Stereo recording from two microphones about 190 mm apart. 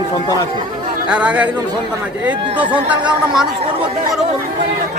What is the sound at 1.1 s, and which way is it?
Speech, 5° right (ahead or behind).